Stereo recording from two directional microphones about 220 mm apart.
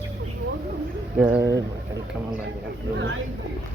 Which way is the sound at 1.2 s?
10° right (ahead or behind).